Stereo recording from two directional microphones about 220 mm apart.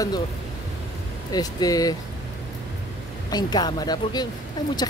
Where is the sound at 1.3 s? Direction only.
15° left (ahead or behind).